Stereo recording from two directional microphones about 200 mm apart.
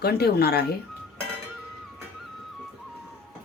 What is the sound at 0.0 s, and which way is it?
Speech, 50° left (ahead or behind).